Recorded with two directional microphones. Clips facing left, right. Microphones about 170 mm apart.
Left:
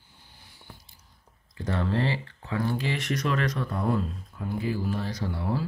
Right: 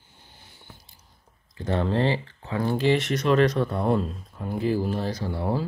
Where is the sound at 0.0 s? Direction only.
20° right (ahead or behind).